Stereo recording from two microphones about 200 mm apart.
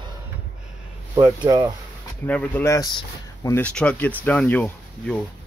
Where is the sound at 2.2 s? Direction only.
10° left (ahead or behind).